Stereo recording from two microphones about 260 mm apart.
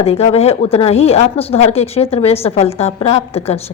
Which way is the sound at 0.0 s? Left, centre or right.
Left.